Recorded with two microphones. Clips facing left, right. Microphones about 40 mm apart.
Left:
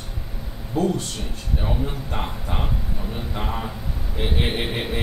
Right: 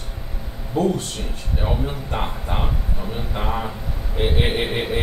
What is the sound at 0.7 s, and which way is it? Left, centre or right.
Speech, right.